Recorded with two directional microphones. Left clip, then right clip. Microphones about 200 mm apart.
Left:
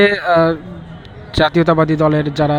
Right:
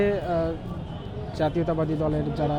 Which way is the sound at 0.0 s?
30° left (ahead or behind).